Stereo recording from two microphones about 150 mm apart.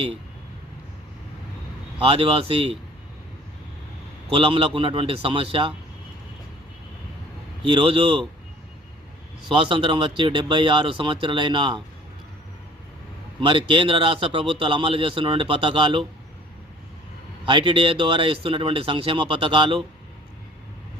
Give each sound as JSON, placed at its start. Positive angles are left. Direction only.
{"t": 2.0, "sound": "a man's voice", "side_deg": -35}
{"t": 4.3, "sound": "a man's voice", "side_deg": -35}
{"t": 7.7, "sound": "a man's voice", "side_deg": -35}
{"t": 9.6, "sound": "a man's voice", "side_deg": -35}
{"t": 13.5, "sound": "a man's voice", "side_deg": -35}
{"t": 17.4, "sound": "a man's voice", "side_deg": -30}